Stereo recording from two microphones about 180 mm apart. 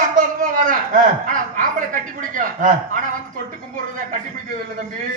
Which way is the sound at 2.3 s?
45° right (ahead or behind).